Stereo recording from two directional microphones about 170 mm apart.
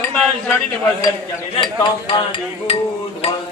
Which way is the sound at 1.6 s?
25° left (ahead or behind).